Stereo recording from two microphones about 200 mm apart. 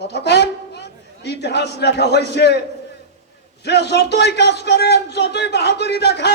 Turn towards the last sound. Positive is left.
turn(degrees=55)  # may be behind; listen again after turning